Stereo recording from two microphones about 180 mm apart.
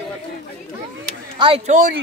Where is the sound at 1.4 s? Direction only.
30° right (ahead or behind).